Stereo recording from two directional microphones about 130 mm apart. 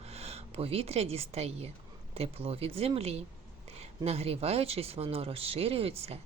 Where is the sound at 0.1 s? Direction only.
50° right (ahead or behind).